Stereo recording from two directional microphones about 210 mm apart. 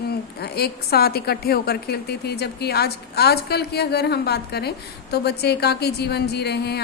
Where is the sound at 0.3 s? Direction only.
50° left (ahead or behind).